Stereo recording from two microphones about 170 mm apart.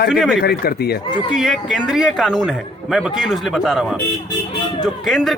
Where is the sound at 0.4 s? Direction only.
65° left (ahead or behind).